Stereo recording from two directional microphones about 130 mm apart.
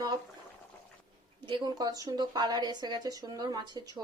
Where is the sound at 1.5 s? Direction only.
35° right (ahead or behind).